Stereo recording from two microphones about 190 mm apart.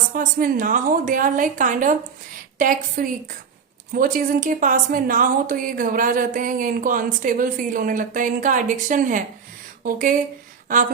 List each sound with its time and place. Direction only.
0.1 s a woman's voice: 45° right (ahead or behind)